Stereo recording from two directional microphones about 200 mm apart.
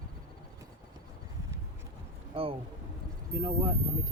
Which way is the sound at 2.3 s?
30° right (ahead or behind).